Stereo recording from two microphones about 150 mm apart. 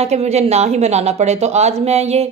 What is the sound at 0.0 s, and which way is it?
A woman's voice, 45° right (ahead or behind).